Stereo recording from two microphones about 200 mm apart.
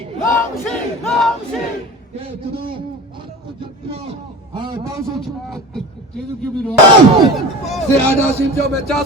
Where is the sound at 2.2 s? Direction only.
25° right (ahead or behind).